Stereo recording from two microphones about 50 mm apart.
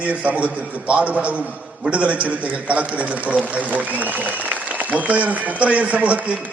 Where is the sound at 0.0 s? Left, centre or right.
Right.